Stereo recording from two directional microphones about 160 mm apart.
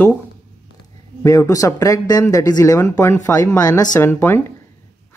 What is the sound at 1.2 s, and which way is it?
Speech, 20° left (ahead or behind).